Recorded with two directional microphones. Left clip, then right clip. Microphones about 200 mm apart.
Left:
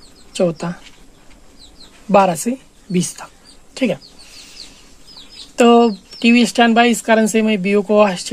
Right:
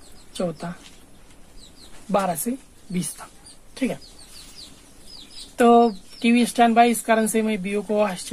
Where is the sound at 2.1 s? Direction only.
45° left (ahead or behind).